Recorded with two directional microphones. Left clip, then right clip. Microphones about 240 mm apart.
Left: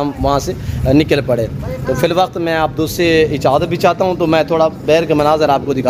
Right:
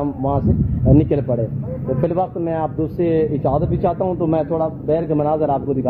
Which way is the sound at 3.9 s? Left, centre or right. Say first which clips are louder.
Left 6 dB; left.